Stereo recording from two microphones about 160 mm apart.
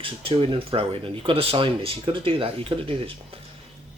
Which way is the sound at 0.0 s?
35° right (ahead or behind).